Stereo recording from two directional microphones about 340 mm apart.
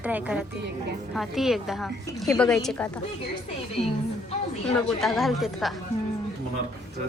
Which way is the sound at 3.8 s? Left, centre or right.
Centre.